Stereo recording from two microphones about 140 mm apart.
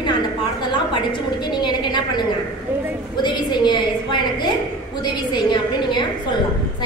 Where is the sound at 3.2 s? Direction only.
35° left (ahead or behind).